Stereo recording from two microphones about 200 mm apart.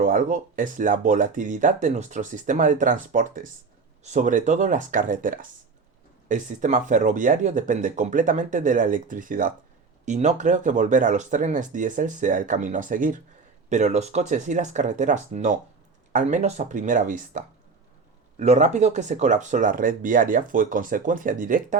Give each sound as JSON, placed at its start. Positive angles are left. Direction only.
{"t": 0.0, "sound": "speech", "side_deg": -40}